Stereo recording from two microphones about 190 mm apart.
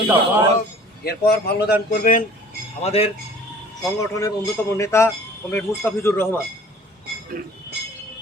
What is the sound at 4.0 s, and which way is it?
A man's voice, 15° left (ahead or behind).